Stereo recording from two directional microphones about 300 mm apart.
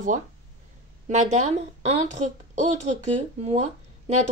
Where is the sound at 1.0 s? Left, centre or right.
Right.